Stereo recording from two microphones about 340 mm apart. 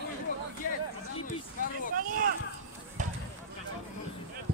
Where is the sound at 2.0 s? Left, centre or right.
Right.